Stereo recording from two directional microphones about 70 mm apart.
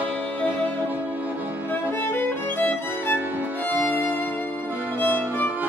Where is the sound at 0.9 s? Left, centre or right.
Right.